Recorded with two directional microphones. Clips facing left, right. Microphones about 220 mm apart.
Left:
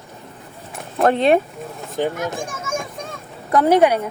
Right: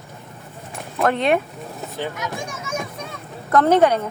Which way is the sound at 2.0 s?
50° left (ahead or behind).